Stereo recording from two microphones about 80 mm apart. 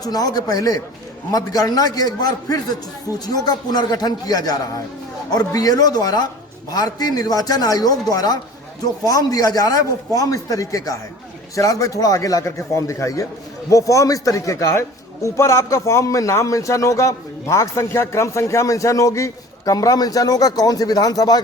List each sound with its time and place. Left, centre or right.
0.0 s a man's voice: left